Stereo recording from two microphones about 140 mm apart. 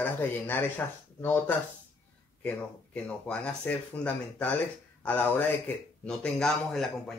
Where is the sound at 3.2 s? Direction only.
10° left (ahead or behind).